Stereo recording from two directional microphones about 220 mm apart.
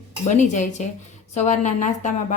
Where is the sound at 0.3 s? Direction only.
35° left (ahead or behind).